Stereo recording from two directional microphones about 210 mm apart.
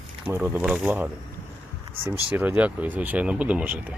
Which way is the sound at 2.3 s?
10° right (ahead or behind).